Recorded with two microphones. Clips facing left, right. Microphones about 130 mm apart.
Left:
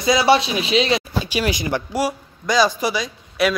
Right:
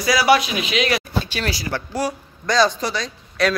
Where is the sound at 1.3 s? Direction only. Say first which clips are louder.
Left 4 dB; 15° left (ahead or behind).